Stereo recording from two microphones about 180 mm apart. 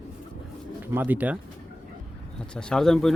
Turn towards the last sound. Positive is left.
turn(degrees=0)  # may be behind; listen again after turning